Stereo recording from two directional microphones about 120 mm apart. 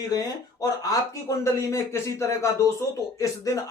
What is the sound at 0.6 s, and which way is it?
Speech, 30° left (ahead or behind).